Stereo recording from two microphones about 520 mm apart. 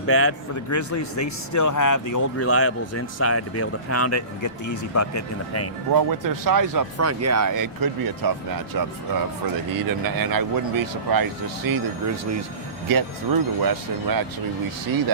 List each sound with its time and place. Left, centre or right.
0.1 s a man's voice: left
5.9 s speech: right
9.7 s speech: right